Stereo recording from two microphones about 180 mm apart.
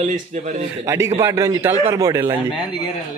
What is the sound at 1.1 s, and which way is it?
A man's voice, 15° right (ahead or behind).